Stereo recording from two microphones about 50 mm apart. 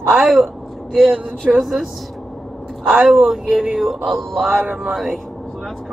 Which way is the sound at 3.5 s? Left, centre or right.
Centre.